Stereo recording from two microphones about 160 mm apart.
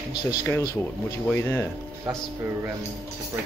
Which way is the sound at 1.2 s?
15° left (ahead or behind).